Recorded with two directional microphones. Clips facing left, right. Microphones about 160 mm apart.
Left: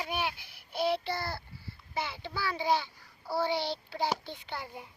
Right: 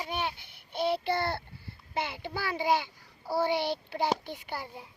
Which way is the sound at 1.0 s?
60° right (ahead or behind).